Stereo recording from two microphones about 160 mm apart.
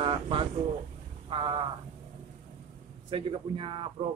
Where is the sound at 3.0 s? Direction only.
30° right (ahead or behind).